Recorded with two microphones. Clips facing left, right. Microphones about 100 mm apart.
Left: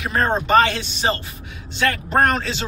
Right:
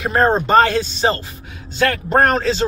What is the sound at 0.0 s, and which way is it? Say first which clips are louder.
A man's voice: right 5 dB; 30° right (ahead or behind).